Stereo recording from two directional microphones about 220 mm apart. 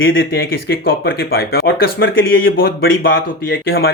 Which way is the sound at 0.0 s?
60° left (ahead or behind).